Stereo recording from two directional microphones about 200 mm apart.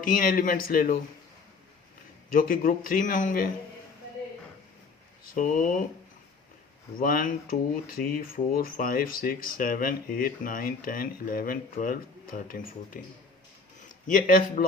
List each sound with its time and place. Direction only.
0.0 s speech: 45° left (ahead or behind)
2.3 s speech: 45° left (ahead or behind)
5.3 s speech: 45° left (ahead or behind)
7.0 s speech: 45° left (ahead or behind)